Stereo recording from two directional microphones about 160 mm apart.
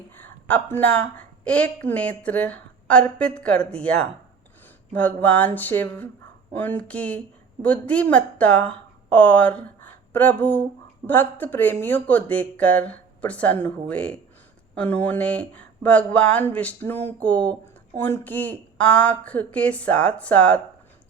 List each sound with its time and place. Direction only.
0.2 s speech: 10° left (ahead or behind)